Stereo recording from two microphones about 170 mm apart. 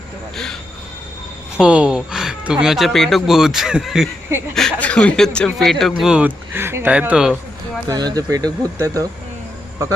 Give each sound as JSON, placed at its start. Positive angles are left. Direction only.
{"t": 1.5, "sound": "speech", "side_deg": -5}
{"t": 7.9, "sound": "speech", "side_deg": -20}